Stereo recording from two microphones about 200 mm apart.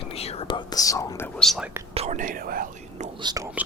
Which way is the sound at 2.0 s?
40° right (ahead or behind).